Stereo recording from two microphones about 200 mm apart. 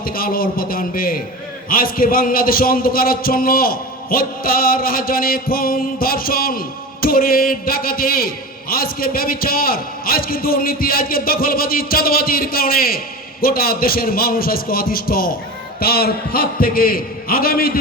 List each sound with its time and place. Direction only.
0.0 s a man's voice: 45° left (ahead or behind)